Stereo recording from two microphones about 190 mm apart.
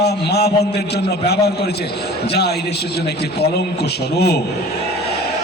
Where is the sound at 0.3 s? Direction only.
60° left (ahead or behind).